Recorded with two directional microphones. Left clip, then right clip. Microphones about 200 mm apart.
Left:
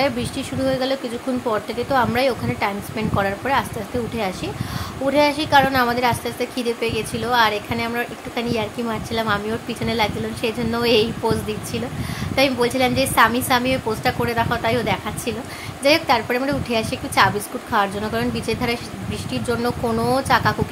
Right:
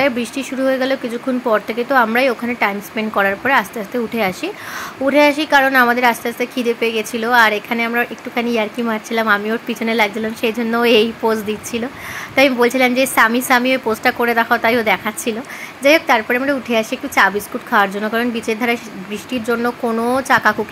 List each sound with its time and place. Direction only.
0.4 s a woman's voice: 15° right (ahead or behind)
5.0 s a woman's voice: 20° right (ahead or behind)
12.4 s a woman's voice: 20° right (ahead or behind)
16.1 s a woman's voice: 10° right (ahead or behind)
20.2 s a woman's voice: 20° right (ahead or behind)